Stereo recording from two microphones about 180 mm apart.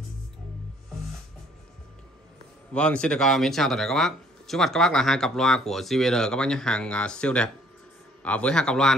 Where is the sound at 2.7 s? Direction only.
5° left (ahead or behind).